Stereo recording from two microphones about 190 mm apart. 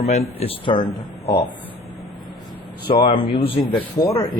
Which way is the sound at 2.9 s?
35° left (ahead or behind).